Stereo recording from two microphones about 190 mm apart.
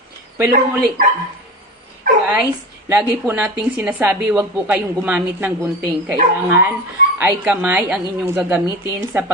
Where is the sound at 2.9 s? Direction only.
10° right (ahead or behind).